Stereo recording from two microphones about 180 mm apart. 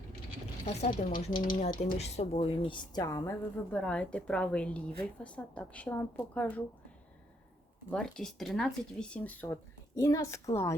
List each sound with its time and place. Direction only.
0.6 s a woman's voice: 40° left (ahead or behind); by 6.6 s 10° left (ahead or behind)
7.9 s a woman's voice: 5° left (ahead or behind)